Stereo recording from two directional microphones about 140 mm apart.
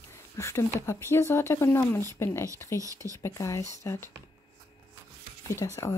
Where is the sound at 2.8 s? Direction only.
25° right (ahead or behind).